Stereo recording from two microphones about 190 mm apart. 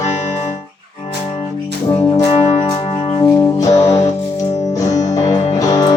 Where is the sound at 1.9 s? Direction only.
15° left (ahead or behind).